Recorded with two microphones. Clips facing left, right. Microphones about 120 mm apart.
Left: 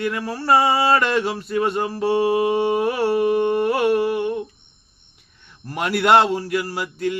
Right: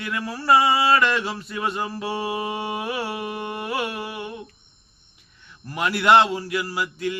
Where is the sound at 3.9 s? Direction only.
50° left (ahead or behind).